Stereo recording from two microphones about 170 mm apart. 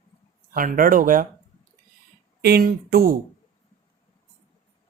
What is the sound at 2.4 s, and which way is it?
Speech, 65° right (ahead or behind).